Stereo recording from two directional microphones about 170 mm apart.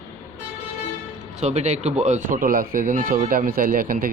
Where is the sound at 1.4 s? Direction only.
40° right (ahead or behind).